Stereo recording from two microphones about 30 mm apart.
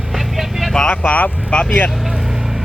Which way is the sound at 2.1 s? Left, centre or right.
Centre.